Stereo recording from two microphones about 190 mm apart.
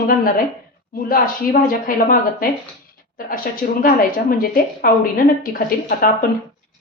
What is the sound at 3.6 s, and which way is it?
A woman's voice, 50° left (ahead or behind).